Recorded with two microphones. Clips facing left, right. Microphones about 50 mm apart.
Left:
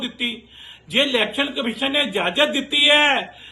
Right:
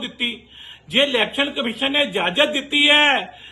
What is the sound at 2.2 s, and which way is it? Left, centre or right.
Speech, right.